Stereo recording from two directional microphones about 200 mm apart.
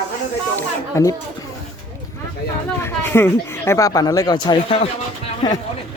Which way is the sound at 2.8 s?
10° left (ahead or behind).